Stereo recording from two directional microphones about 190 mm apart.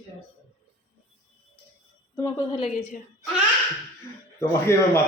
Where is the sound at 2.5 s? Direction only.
30° left (ahead or behind).